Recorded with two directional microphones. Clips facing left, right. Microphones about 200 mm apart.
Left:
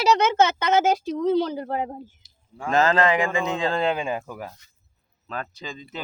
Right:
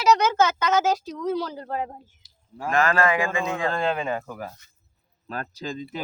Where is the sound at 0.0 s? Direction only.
25° left (ahead or behind).